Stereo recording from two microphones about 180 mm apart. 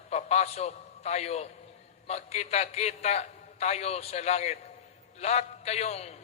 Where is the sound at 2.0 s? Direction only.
35° left (ahead or behind).